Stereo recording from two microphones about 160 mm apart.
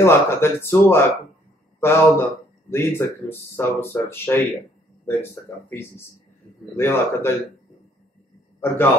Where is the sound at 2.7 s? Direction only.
15° left (ahead or behind).